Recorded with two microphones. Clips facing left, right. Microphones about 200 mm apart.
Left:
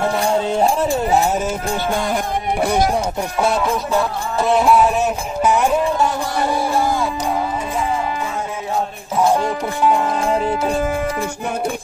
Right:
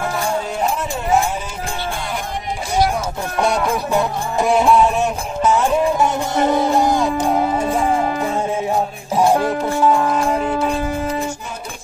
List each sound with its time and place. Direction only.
0.2 s music: 25° left (ahead or behind)
1.9 s music: 45° left (ahead or behind)
2.6 s speech: 60° left (ahead or behind)
3.3 s a sound: centre (ahead or behind)
5.9 s music: 20° right (ahead or behind)
7.5 s music: 50° right (ahead or behind)